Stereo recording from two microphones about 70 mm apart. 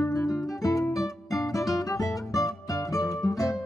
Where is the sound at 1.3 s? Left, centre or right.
Left.